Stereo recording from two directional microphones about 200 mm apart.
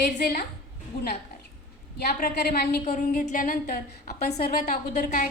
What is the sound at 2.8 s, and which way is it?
A woman's voice, 40° left (ahead or behind).